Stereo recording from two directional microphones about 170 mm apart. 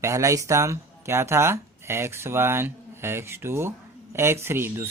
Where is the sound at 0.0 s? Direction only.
15° right (ahead or behind).